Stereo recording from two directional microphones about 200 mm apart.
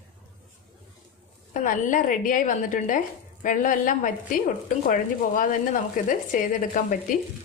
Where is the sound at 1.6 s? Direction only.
40° left (ahead or behind).